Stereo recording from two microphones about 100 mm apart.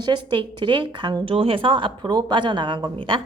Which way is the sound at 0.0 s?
50° right (ahead or behind).